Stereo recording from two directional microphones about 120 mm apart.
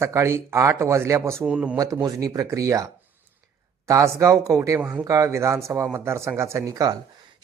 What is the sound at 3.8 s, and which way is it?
Speech, 25° right (ahead or behind).